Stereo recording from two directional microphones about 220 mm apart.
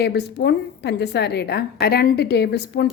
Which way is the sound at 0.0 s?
50° left (ahead or behind).